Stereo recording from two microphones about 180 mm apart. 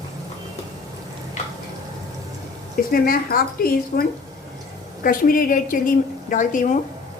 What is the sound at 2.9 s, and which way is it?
A woman's voice, 55° left (ahead or behind).